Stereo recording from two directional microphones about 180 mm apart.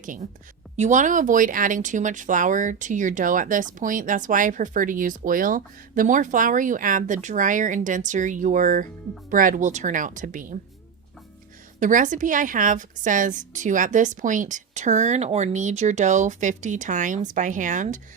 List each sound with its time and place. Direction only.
0.0 s speech: 45° right (ahead or behind)
11.8 s speech: 45° right (ahead or behind)